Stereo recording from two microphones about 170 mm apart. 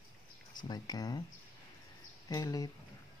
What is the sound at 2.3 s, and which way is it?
Speech, 20° left (ahead or behind).